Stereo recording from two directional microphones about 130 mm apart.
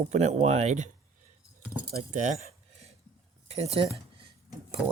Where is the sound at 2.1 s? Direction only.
70° right (ahead or behind).